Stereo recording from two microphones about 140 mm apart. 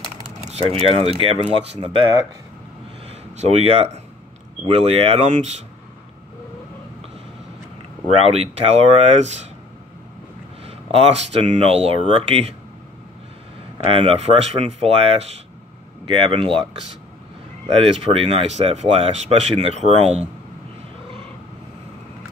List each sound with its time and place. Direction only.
0.5 s speech: 45° right (ahead or behind)
3.3 s speech: 50° right (ahead or behind)
8.3 s speech: 45° right (ahead or behind)
10.6 s speech: 45° right (ahead or behind)
13.8 s speech: 40° right (ahead or behind)
17.7 s speech: 45° right (ahead or behind)